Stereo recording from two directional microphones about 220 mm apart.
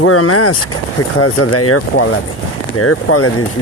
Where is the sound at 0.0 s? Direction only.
85° left.